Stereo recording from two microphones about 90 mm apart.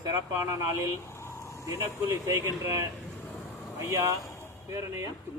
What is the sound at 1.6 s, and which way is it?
A man's voice, 30° right (ahead or behind).